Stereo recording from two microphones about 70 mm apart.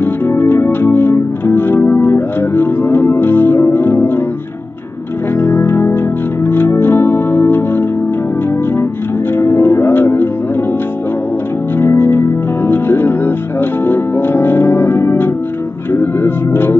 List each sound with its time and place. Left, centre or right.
0.0 s music: left
5.4 s music: left
9.3 s music: left
11.8 s music: left